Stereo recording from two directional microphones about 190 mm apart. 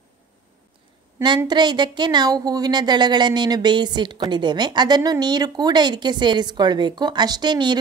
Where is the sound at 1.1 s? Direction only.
20° right (ahead or behind).